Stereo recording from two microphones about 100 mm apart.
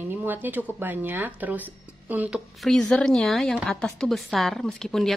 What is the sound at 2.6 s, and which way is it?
A woman's voice, 5° left (ahead or behind).